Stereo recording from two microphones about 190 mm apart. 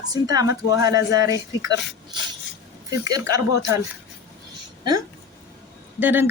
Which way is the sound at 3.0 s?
20° right (ahead or behind).